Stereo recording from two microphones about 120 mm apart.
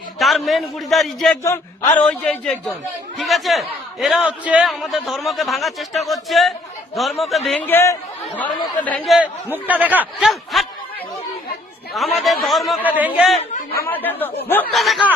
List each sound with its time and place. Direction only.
0.2 s speech: centre (ahead or behind)
1.5 s a man's voice: 15° left (ahead or behind)
7.7 s a man's voice: 20° left (ahead or behind)
9.2 s speech: 15° right (ahead or behind)
10.2 s speech: centre (ahead or behind)
11.9 s speech: centre (ahead or behind)
13.8 s a man's voice: 15° left (ahead or behind)
14.7 s speech: centre (ahead or behind)